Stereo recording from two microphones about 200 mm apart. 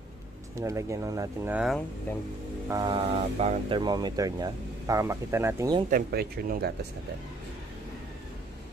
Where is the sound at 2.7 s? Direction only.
20° right (ahead or behind).